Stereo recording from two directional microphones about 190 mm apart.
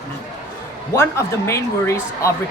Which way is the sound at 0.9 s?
15° left (ahead or behind).